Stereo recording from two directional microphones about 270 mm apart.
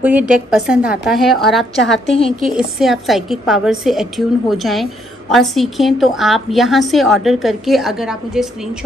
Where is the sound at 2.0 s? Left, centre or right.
Left.